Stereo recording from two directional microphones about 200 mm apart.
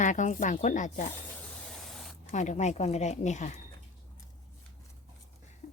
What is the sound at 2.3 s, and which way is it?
Speech, 35° left (ahead or behind).